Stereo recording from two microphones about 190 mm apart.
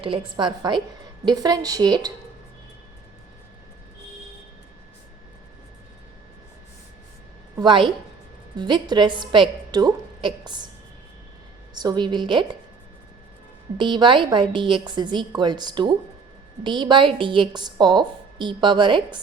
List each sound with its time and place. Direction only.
0.0 s a woman's voice: 25° right (ahead or behind)
7.6 s a woman's voice: 25° right (ahead or behind)
11.7 s a woman's voice: 20° right (ahead or behind)
13.7 s a woman's voice: 25° right (ahead or behind)